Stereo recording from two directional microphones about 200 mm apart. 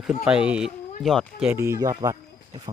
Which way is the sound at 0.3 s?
5° right (ahead or behind).